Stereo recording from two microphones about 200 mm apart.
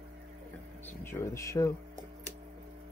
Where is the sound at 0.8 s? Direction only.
10° left (ahead or behind).